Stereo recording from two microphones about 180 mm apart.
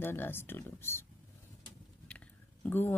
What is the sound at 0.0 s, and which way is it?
Speech, 10° left (ahead or behind).